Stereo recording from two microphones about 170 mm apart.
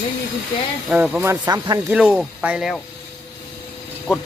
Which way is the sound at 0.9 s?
5° right (ahead or behind).